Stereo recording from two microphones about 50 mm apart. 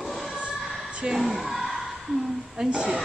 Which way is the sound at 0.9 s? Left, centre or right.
Centre.